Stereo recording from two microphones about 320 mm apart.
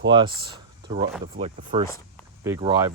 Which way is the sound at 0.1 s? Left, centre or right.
Centre.